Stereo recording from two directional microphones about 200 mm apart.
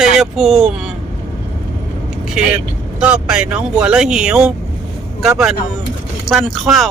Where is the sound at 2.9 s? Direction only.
5° right (ahead or behind).